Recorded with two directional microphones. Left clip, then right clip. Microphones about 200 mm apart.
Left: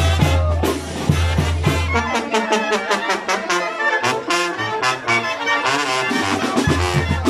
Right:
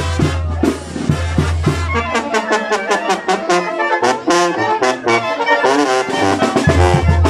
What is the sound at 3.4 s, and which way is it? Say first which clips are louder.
Brass instrument: right 4 dB; 30° right (ahead or behind).